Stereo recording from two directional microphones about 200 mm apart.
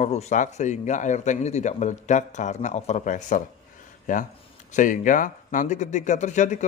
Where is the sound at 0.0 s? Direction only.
35° left (ahead or behind).